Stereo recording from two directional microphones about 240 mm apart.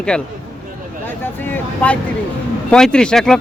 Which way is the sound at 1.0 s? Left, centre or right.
Centre.